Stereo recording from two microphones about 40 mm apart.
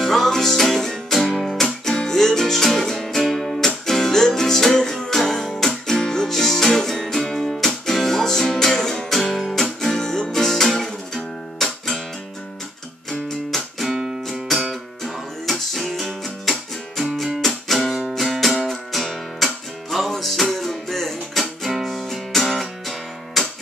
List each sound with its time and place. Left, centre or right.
0.0 s music: centre
13.7 s music: centre
17.4 s music: centre